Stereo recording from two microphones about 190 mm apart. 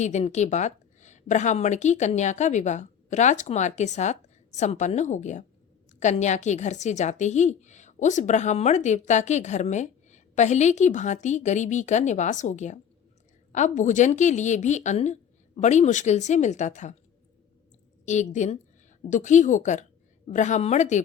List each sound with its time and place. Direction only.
0.0 s a woman's voice: 35° left (ahead or behind)
18.0 s a woman's voice: 40° left (ahead or behind)